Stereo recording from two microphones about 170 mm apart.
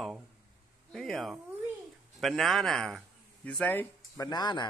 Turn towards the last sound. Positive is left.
turn(degrees=25)  # may be behind; listen again after turning